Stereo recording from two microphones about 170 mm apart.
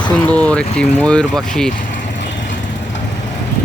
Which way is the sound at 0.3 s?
10° left (ahead or behind).